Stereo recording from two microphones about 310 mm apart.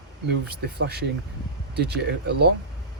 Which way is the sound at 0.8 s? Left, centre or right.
Right.